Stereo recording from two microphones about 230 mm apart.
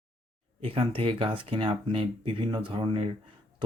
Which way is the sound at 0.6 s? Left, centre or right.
Right.